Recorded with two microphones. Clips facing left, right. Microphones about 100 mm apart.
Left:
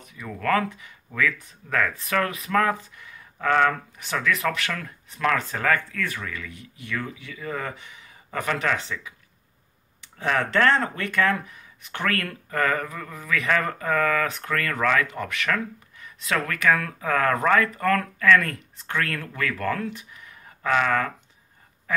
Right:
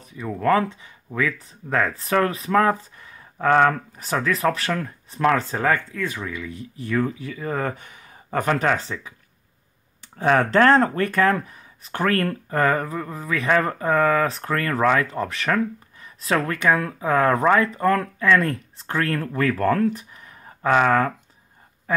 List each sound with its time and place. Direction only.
0.0 s speech: 30° right (ahead or behind)
6.5 s speech: 35° right (ahead or behind)
10.1 s speech: 35° right (ahead or behind)